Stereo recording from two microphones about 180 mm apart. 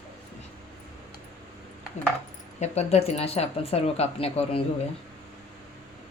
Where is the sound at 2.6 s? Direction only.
35° left (ahead or behind).